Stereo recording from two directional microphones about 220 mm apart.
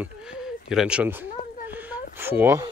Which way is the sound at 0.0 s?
5° right (ahead or behind).